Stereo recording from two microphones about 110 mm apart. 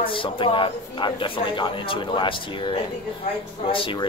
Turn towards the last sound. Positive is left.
turn(degrees=50)  # may be behind; listen again after turning